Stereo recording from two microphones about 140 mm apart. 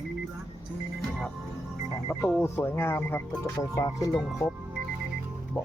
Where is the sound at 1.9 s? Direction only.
15° left (ahead or behind).